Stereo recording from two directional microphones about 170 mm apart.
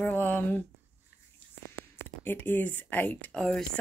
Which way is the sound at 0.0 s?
10° left (ahead or behind).